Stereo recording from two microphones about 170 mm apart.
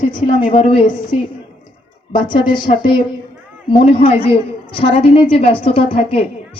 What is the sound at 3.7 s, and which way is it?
A woman's voice, 30° left (ahead or behind).